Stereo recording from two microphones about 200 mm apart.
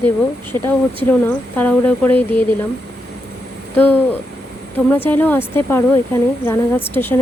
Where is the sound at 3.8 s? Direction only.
10° left (ahead or behind).